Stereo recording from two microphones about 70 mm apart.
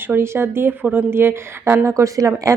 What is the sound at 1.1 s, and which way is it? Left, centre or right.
Speech, right.